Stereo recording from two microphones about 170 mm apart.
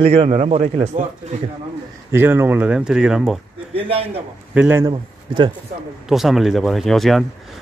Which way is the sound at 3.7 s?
35° right (ahead or behind).